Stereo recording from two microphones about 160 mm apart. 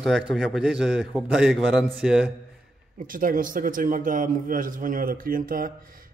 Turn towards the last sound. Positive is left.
turn(degrees=-60)  # may be behind; listen again after turning